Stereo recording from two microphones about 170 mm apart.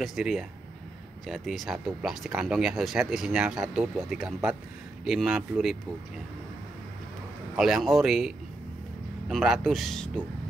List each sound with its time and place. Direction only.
0.0 s speech: centre (ahead or behind)
7.5 s speech: centre (ahead or behind)
9.3 s speech: centre (ahead or behind)